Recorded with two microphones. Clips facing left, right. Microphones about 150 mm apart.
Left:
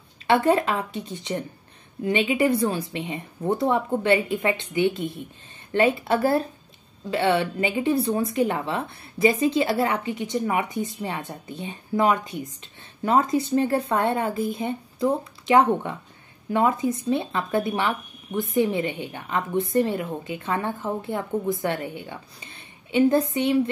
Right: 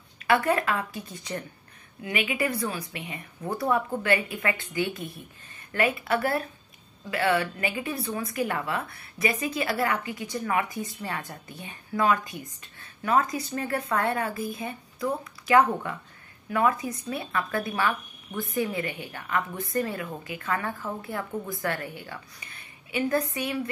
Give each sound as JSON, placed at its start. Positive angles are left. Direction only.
{"t": 0.3, "sound": "speech", "side_deg": 25}